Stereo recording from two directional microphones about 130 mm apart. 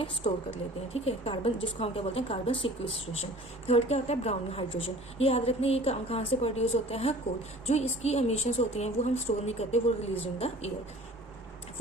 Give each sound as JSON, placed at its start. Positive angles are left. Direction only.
{"t": 0.0, "sound": "a woman's voice", "side_deg": 50}